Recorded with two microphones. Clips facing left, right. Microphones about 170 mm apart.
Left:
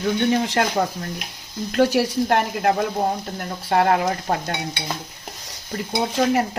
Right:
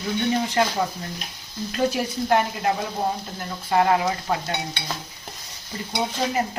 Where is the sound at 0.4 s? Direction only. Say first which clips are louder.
Left 1 dB; 75° left (ahead or behind).